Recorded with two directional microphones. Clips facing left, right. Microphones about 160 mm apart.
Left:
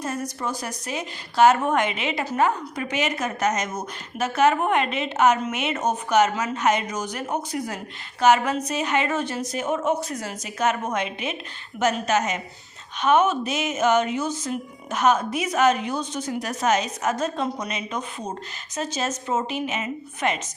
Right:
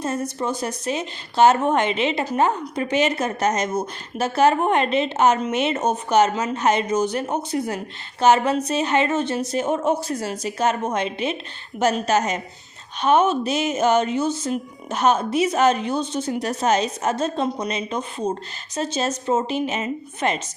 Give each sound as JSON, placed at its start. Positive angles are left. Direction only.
{"t": 0.0, "sound": "a woman's voice", "side_deg": -25}